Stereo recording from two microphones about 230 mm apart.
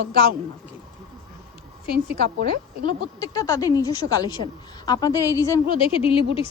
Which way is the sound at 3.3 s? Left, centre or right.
Centre.